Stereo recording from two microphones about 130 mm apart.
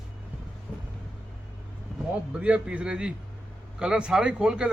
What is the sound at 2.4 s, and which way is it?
A man's voice, 10° right (ahead or behind).